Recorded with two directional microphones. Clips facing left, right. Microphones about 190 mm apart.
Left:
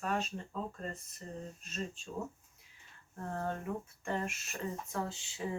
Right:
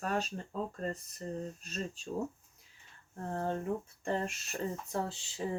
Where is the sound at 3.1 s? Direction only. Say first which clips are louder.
Right 3 dB; 35° right (ahead or behind).